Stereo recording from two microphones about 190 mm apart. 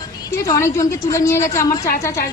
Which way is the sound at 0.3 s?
15° left (ahead or behind).